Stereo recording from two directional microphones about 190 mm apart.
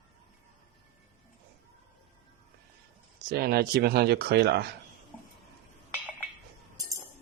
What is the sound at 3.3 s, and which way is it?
Speech, 55° right (ahead or behind).